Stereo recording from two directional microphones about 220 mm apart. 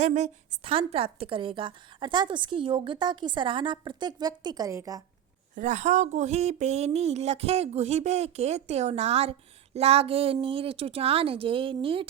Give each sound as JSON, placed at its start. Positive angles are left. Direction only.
{"t": 0.0, "sound": "a woman's voice", "side_deg": -30}
{"t": 5.5, "sound": "a woman's voice", "side_deg": -35}